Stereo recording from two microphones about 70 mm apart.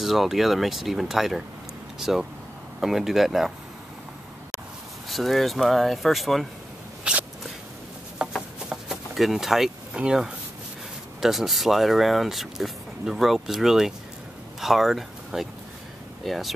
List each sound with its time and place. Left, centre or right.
0.0 s speech: centre
5.1 s speech: centre
7.1 s walk: centre
8.4 s a sound: centre
11.1 s speech: centre